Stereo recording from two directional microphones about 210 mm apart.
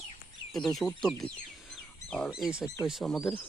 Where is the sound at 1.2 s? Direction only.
25° left (ahead or behind).